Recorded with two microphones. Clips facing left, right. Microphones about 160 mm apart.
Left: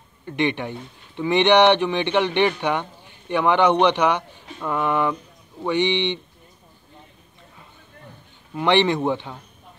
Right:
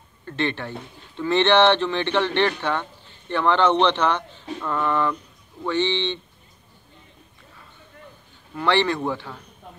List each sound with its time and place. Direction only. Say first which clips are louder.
0.2 s a man's voice: left 3 dB; 15° left (ahead or behind)
8.5 s speech: left 3 dB; 20° left (ahead or behind)